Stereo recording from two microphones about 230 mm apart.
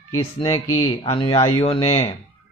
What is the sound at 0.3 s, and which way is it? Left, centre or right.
Speech, centre.